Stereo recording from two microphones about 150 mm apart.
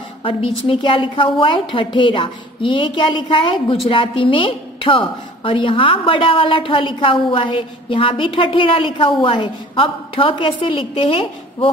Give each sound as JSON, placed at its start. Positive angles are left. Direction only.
{"t": 0.2, "sound": "a woman's voice", "side_deg": 35}